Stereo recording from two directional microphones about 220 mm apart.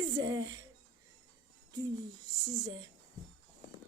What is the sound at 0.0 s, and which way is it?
Speech, 15° right (ahead or behind).